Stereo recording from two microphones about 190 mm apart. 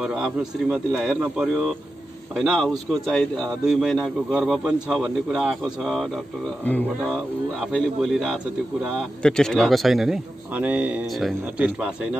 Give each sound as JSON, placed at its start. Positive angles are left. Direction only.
{"t": 0.0, "sound": "a man's voice", "side_deg": 0}
{"t": 7.7, "sound": "a man's voice", "side_deg": 0}